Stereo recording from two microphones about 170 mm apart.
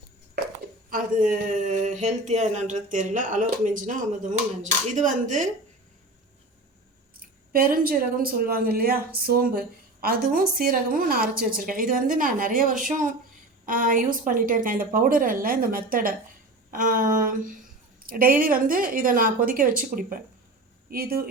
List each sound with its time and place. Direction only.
0.9 s speech: 55° right (ahead or behind)
7.2 s speech: 60° right (ahead or behind)